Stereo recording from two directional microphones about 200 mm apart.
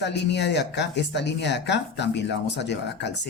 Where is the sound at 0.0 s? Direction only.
60° left (ahead or behind).